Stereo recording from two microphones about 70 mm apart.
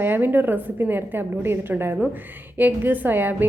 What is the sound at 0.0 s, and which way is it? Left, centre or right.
A woman's voice, right.